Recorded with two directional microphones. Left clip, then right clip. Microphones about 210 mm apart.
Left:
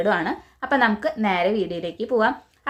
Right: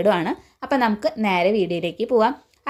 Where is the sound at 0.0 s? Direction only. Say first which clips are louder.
Right 2 dB; 30° right (ahead or behind).